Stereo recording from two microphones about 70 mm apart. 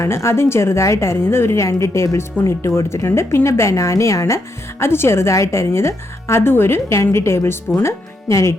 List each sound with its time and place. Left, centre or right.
0.0 s a woman's voice: left
4.8 s a woman's voice: left